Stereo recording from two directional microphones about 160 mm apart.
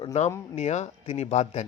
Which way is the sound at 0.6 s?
45° left (ahead or behind).